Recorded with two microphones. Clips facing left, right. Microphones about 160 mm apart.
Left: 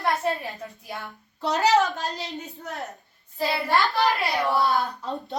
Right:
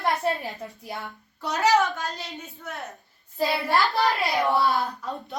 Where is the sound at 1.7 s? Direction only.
20° left (ahead or behind).